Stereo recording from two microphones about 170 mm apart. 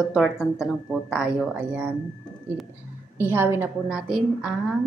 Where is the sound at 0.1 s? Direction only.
Centre (ahead or behind).